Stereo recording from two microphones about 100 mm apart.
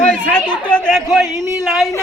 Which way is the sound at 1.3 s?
30° right (ahead or behind).